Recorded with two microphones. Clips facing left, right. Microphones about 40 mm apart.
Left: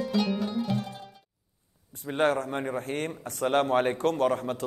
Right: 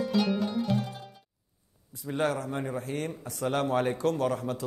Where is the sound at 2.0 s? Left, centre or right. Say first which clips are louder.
Left 3 dB; left.